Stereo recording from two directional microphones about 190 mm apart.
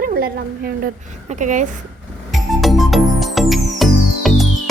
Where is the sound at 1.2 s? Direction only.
40° right (ahead or behind).